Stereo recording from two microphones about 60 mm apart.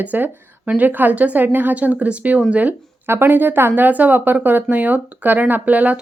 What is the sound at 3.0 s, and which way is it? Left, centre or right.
Speech, right.